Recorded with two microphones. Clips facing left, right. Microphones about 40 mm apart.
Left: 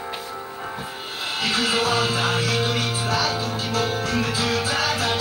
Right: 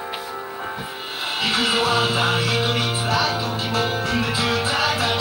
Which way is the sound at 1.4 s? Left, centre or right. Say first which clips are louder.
Right 1 dB; right.